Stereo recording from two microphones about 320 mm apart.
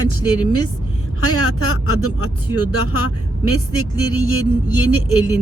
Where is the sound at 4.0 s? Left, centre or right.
Left.